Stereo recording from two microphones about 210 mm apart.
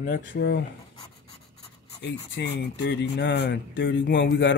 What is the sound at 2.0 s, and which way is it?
Speech, 55° left (ahead or behind).